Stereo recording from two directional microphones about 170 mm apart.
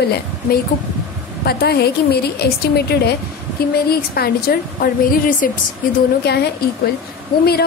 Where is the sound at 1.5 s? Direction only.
70° left (ahead or behind).